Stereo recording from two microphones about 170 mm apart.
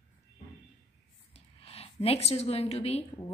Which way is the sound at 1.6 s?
35° left (ahead or behind).